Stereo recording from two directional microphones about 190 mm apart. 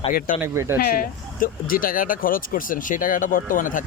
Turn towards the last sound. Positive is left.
turn(degrees=45)  # may be behind; listen again after turning